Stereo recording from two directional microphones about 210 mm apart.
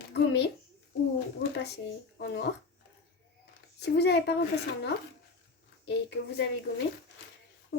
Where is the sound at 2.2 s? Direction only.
55° left (ahead or behind).